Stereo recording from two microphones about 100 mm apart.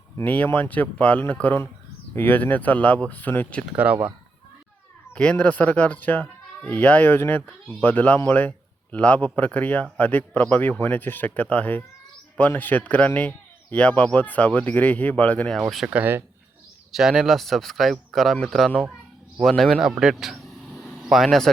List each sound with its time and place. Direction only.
0.3 s speech: 15° left (ahead or behind)
3.7 s speech: 10° right (ahead or behind)
5.1 s speech: 15° left (ahead or behind)
15.5 s speech: centre (ahead or behind)
15.9 s speech: 15° right (ahead or behind)
16.9 s speech: 5° right (ahead or behind)